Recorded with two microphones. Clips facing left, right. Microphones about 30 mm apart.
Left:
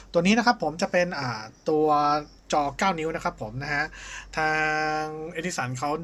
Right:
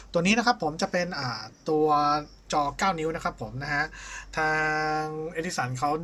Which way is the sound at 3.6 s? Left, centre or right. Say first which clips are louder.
Even; left.